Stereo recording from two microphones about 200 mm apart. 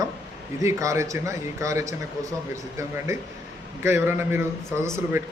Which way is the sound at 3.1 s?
15° right (ahead or behind).